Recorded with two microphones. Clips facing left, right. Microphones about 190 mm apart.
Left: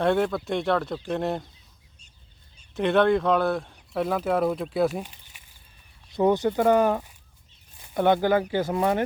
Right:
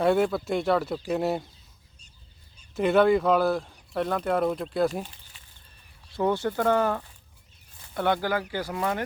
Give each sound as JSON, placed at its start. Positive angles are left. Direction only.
{"t": 0.0, "sound": "speech", "side_deg": -5}
{"t": 2.7, "sound": "speech", "side_deg": -5}
{"t": 6.1, "sound": "speech", "side_deg": 20}